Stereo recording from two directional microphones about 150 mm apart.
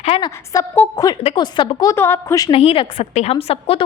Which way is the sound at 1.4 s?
30° left (ahead or behind).